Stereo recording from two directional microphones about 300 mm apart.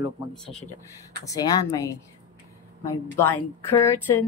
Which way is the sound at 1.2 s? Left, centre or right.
Centre.